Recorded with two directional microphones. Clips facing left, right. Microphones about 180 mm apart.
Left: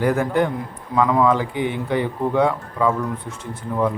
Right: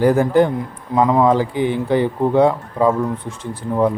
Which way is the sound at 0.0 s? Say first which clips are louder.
Right 5 dB; 30° right (ahead or behind).